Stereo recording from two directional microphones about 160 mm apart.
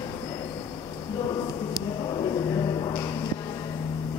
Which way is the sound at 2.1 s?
30° left (ahead or behind).